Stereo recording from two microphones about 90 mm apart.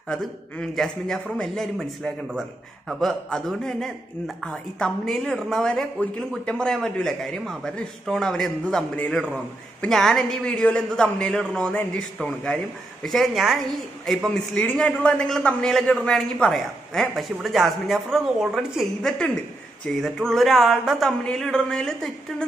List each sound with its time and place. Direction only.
0.1 s a man's voice: 5° left (ahead or behind)
13.0 s a man's voice: centre (ahead or behind)